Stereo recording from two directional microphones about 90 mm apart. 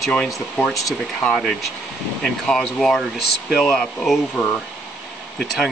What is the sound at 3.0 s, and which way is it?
Speech, 5° right (ahead or behind).